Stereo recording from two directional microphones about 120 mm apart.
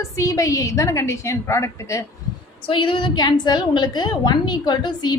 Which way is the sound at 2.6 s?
45° left (ahead or behind).